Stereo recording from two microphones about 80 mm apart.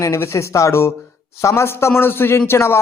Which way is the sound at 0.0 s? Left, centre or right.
Left.